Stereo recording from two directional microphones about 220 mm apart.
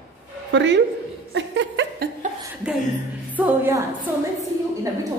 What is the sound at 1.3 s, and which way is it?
Chuckle, 55° right (ahead or behind).